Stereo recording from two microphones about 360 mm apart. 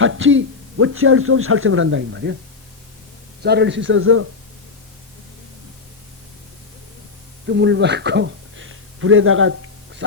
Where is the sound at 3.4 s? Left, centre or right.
Right.